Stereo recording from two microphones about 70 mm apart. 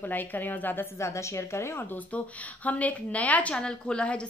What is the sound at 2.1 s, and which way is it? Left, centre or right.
A woman's voice, left.